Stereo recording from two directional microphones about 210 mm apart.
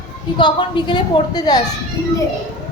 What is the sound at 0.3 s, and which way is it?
A woman's voice, 20° left (ahead or behind).